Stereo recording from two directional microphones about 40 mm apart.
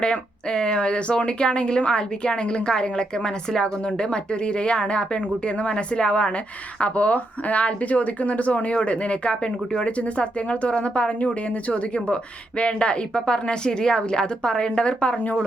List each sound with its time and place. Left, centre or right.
0.0 s speech: left